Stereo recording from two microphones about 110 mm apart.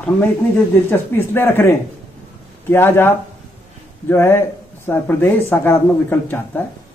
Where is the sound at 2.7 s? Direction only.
20° left (ahead or behind).